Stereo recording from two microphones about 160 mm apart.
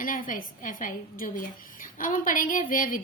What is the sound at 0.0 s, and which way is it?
A woman's voice, 60° left (ahead or behind).